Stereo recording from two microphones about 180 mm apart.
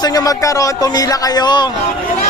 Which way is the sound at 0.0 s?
20° left (ahead or behind).